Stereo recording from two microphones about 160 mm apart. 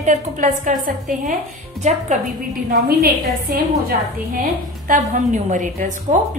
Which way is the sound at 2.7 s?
65° right (ahead or behind).